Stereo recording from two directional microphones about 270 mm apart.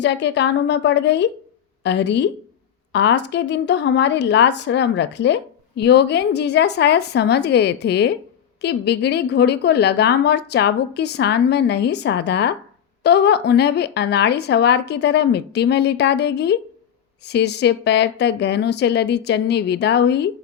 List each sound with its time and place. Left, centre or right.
0.0 s speech: left